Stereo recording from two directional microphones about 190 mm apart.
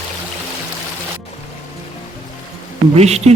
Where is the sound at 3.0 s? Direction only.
35° right (ahead or behind).